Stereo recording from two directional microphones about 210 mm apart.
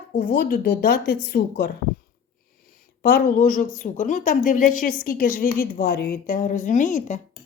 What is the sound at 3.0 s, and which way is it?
A woman's voice, 40° left (ahead or behind).